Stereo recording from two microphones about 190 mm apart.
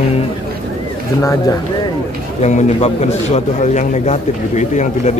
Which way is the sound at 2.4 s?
35° left (ahead or behind).